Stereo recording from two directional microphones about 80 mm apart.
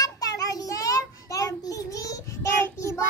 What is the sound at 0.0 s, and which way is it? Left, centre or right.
Child singing, left.